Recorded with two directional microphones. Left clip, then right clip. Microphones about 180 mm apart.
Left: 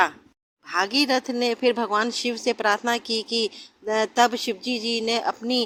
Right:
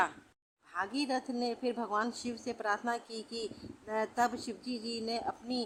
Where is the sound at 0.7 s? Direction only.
25° left (ahead or behind).